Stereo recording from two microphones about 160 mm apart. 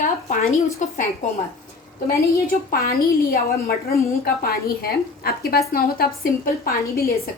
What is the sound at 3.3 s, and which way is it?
A woman's voice, 70° left (ahead or behind).